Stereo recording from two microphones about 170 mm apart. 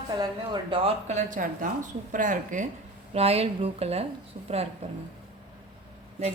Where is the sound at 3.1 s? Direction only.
35° right (ahead or behind).